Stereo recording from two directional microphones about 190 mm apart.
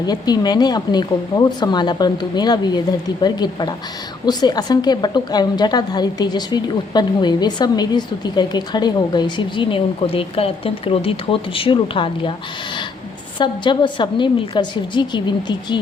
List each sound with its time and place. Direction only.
0.0 s a woman's voice: 20° left (ahead or behind)
13.4 s a woman's voice: 25° left (ahead or behind)